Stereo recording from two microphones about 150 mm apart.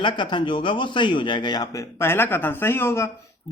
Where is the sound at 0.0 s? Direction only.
30° left (ahead or behind).